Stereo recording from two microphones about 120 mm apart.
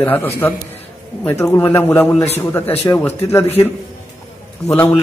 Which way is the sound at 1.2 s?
20° left (ahead or behind).